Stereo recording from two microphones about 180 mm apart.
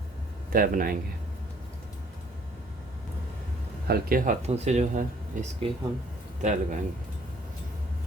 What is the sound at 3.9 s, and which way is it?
Speech, 50° right (ahead or behind).